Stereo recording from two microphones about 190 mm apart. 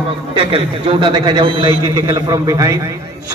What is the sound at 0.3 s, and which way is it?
A man's voice, 25° right (ahead or behind).